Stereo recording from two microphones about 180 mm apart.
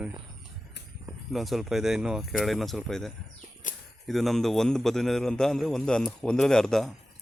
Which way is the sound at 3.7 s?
45° left (ahead or behind).